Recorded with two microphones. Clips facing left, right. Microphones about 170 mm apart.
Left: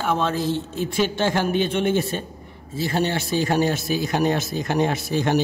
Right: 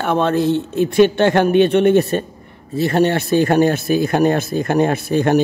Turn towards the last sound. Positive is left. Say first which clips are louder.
# right 6 dB
turn(degrees=-55)  # may be behind; listen again after turning